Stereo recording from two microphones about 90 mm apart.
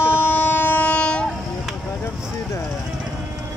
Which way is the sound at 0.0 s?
25° left (ahead or behind).